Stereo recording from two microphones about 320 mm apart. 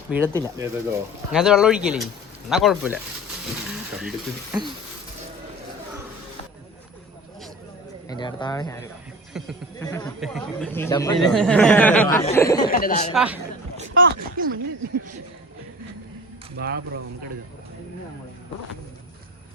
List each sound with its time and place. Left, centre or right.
0.1 s speech: centre
8.0 s speech: centre
9.3 s speech: centre
9.8 s speech: centre
12.6 s speech: left
13.1 s speech: centre
13.9 s speech: right
16.6 s speech: right